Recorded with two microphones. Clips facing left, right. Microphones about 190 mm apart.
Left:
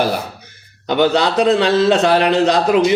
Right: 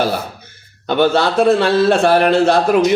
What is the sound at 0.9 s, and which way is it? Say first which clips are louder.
A man's voice: even; 15° left (ahead or behind).